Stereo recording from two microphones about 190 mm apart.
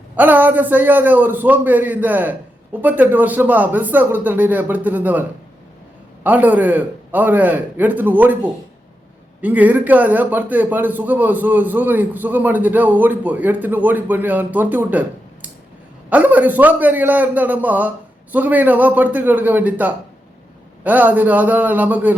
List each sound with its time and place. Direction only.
0.2 s a man's voice: 10° right (ahead or behind)
6.2 s a man's voice: 10° right (ahead or behind)
9.4 s a man's voice: 10° right (ahead or behind)